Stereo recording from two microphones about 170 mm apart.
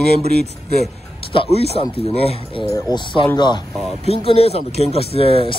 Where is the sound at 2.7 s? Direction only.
25° left (ahead or behind).